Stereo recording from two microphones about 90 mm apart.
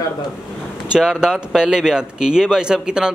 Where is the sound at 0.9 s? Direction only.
5° right (ahead or behind).